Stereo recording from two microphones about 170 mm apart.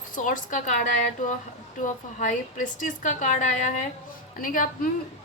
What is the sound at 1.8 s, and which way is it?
A woman's voice, 45° left (ahead or behind).